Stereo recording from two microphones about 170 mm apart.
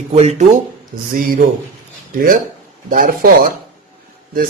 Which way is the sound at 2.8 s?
55° right (ahead or behind).